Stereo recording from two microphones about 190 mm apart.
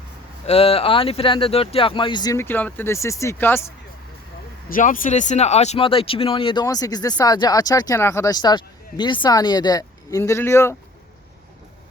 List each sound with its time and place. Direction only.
0.4 s speech: 30° left (ahead or behind); by 3.7 s 10° left (ahead or behind)
4.7 s speech: 45° left (ahead or behind); by 10.8 s 15° left (ahead or behind)